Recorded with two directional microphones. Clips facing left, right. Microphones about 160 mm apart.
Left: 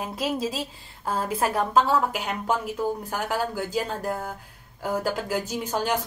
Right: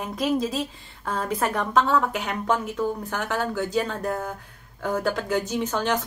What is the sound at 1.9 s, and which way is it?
Speech, 10° left (ahead or behind).